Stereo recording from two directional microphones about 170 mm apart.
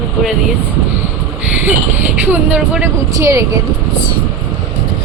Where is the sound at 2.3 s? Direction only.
10° right (ahead or behind).